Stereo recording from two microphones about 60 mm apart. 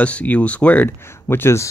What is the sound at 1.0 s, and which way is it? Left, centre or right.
Speech, left.